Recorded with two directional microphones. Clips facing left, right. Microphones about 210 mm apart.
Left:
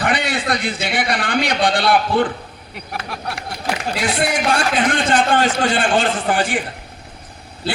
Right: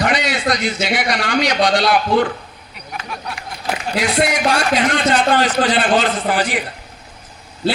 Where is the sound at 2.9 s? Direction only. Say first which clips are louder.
Left 1 dB; 65° left (ahead or behind).